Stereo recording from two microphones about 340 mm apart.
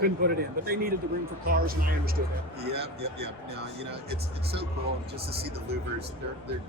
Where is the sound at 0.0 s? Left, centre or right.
Right.